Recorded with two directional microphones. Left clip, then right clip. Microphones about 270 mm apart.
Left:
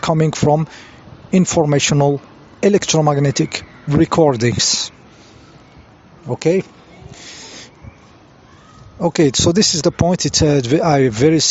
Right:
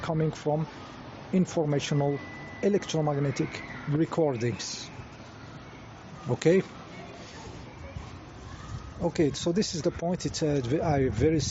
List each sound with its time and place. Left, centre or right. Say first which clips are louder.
0.0 s speech: left 14 dB; left
6.2 s speech: left 7 dB; left
9.0 s speech: left 13 dB; left